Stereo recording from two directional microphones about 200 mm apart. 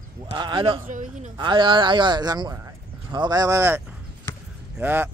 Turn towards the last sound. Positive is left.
turn(degrees=-10)  # may be behind; listen again after turning